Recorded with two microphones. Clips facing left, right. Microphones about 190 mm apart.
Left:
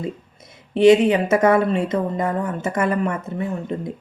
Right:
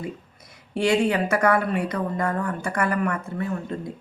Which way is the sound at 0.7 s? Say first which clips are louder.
Left 8 dB; 20° left (ahead or behind).